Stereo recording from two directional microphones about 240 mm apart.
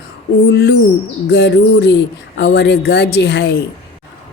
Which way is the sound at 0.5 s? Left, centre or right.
Left.